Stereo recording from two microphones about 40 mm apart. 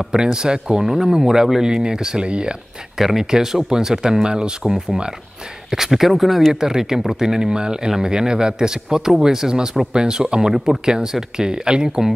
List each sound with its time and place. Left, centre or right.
0.0 s speech: centre
3.0 s speech: centre
5.7 s speech: centre